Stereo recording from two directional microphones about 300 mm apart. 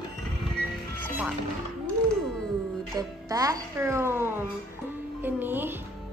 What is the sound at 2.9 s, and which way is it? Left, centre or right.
A woman's voice, centre.